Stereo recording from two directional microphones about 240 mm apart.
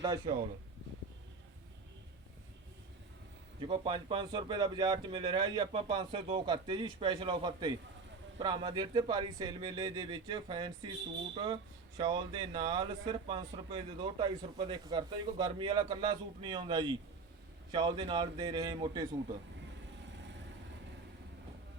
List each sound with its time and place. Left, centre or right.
0.0 s speech: centre
3.6 s speech: centre